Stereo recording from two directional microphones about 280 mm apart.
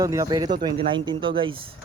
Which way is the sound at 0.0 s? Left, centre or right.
Centre.